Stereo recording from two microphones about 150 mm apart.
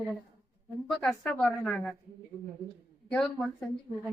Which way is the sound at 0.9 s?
5° left (ahead or behind).